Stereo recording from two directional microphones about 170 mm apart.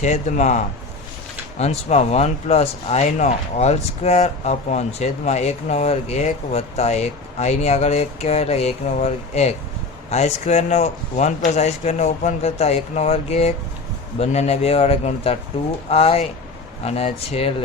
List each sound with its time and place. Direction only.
0.0 s speech: 45° left (ahead or behind)